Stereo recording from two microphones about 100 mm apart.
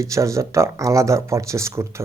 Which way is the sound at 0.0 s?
30° right (ahead or behind).